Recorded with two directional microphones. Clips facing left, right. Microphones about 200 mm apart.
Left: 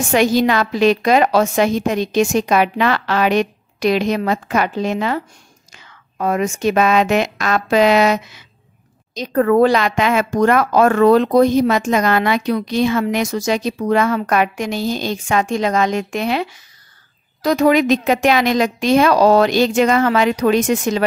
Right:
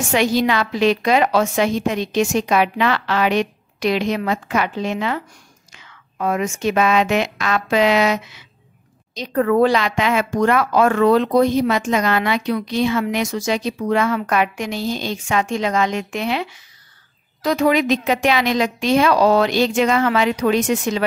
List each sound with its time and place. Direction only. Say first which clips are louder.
0.1 s a woman's voice: left 3 dB; 45° left (ahead or behind)